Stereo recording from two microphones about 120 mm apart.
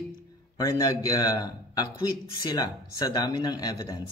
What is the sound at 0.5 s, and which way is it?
Speech, 30° left (ahead or behind).